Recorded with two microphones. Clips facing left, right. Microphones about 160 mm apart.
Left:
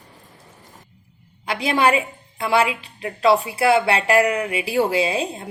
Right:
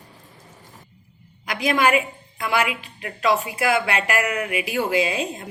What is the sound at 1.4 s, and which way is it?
A woman's voice, 30° left (ahead or behind).